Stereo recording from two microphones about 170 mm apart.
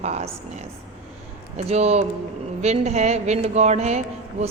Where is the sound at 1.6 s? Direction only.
40° right (ahead or behind).